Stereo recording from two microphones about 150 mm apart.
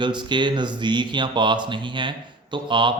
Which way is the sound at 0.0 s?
30° right (ahead or behind).